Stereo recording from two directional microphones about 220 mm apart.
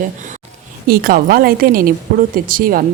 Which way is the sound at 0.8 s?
40° right (ahead or behind).